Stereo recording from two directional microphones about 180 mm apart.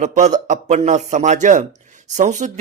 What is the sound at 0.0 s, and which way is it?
Speech, 40° right (ahead or behind).